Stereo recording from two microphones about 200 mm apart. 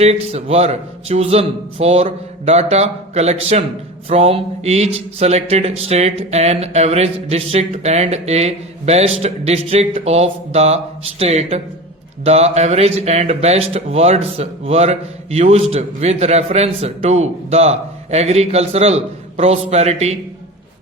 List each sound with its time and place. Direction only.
0.0 s speech: 30° right (ahead or behind)